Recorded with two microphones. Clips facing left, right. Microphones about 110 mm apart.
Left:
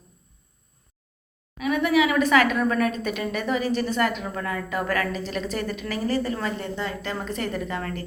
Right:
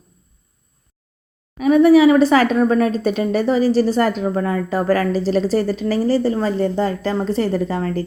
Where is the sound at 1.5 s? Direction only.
35° right (ahead or behind).